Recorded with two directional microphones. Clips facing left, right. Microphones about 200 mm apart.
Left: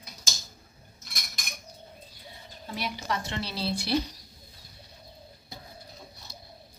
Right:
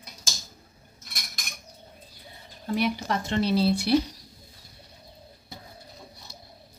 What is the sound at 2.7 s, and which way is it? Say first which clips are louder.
Speech: right 7 dB; 50° right (ahead or behind).